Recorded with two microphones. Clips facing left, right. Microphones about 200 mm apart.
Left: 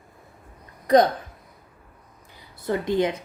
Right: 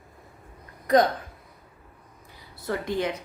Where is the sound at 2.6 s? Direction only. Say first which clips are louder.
Left 5 dB; 20° left (ahead or behind).